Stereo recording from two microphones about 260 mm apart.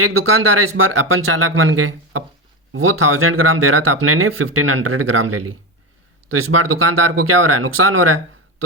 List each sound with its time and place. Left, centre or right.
0.0 s speech: right